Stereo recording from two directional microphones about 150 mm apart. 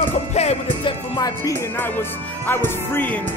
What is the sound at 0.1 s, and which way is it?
Music, 45° left (ahead or behind).